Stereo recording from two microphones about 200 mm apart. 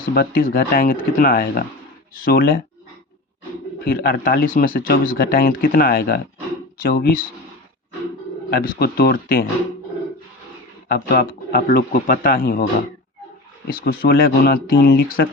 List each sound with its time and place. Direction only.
0.0 s speech: 45° left (ahead or behind)
3.8 s speech: 45° left (ahead or behind)
8.4 s speech: 45° left (ahead or behind)
10.8 s speech: 50° left (ahead or behind)
13.7 s speech: 45° left (ahead or behind)